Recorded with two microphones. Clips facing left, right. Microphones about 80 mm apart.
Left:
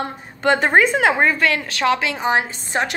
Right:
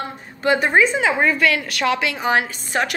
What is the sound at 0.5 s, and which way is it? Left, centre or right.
Speech, left.